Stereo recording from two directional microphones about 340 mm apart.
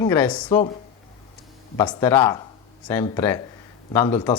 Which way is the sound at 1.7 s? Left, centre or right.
Centre.